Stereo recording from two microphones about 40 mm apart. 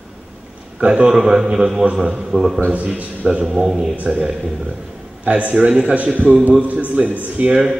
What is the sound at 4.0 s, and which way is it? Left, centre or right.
Speech, right.